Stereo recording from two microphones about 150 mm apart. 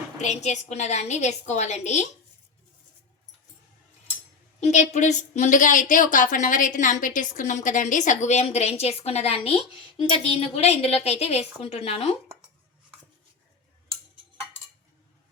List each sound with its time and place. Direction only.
0.2 s a woman's voice: 50° left (ahead or behind)
4.6 s a woman's voice: 50° left (ahead or behind)